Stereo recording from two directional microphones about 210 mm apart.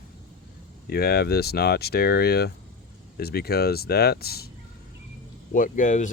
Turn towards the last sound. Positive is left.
turn(degrees=35)  # may be behind; listen again after turning